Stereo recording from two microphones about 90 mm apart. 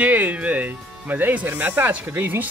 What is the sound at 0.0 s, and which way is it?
Music, 20° right (ahead or behind).